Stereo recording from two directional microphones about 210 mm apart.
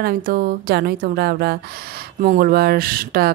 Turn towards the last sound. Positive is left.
turn(degrees=-45)  # may be behind; listen again after turning